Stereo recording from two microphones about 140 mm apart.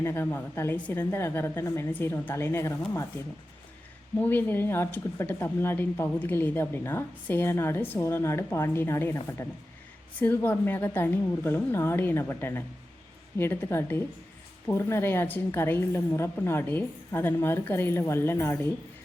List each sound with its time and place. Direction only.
0.0 s a woman's voice: 15° left (ahead or behind)
4.2 s a woman's voice: 15° left (ahead or behind)